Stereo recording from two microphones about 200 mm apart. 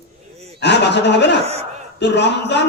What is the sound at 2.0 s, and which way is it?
Speech, 60° left (ahead or behind).